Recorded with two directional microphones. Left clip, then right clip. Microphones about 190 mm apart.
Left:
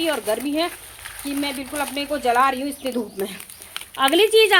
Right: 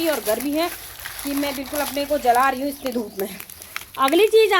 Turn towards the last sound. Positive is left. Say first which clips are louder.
# even
turn(degrees=0)  # may be behind; listen again after turning